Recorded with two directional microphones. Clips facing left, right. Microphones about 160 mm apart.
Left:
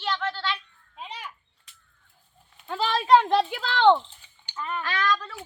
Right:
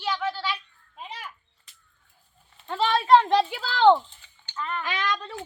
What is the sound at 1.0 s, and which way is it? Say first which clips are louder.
Arrow: even; centre (ahead or behind).